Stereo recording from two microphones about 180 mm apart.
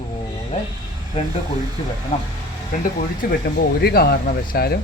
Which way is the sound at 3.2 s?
55° left (ahead or behind).